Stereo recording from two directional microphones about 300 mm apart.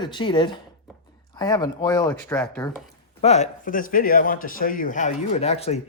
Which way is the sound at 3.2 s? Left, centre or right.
Left.